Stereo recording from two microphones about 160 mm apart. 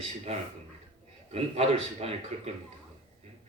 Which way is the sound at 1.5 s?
40° right (ahead or behind).